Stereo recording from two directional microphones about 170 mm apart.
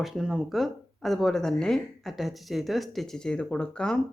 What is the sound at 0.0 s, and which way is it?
Speech, centre (ahead or behind).